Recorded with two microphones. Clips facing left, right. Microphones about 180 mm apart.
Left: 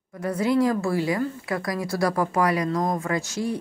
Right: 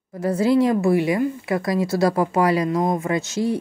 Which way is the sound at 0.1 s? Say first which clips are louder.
Right 4 dB; 30° right (ahead or behind).